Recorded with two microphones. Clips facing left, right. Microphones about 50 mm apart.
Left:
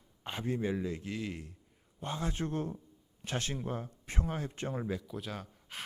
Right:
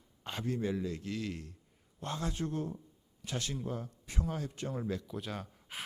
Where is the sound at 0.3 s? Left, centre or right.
Centre.